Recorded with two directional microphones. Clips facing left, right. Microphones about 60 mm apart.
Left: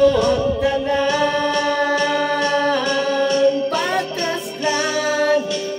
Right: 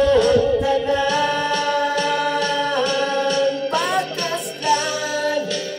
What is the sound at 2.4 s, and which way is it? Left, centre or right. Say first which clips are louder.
Music: left 3 dB; left.